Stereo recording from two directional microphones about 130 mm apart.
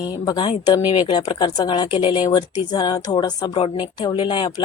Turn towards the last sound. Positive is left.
turn(degrees=40)  # may be behind; listen again after turning